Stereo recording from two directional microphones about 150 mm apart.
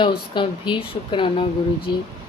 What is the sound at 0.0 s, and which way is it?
A woman's voice, 30° left (ahead or behind).